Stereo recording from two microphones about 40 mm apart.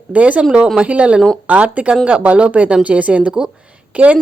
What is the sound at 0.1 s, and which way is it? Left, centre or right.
A woman's voice, right.